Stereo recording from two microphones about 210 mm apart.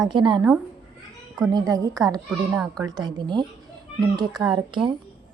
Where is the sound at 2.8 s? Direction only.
20° right (ahead or behind).